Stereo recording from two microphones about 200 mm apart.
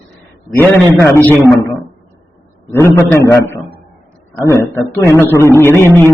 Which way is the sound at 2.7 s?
10° left (ahead or behind).